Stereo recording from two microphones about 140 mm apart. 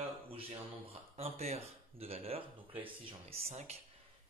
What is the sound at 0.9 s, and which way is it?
Speech, 50° right (ahead or behind).